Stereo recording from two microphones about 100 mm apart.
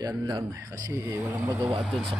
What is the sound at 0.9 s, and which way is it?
Speech, 30° right (ahead or behind).